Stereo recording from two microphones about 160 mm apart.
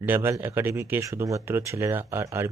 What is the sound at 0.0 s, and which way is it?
Speech, 15° right (ahead or behind).